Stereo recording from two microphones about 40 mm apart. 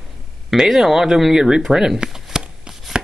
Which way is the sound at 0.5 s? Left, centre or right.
Centre.